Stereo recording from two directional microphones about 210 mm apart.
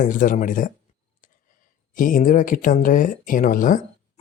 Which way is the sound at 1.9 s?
40° left (ahead or behind).